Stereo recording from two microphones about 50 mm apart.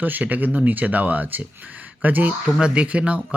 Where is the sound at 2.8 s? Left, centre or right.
Right.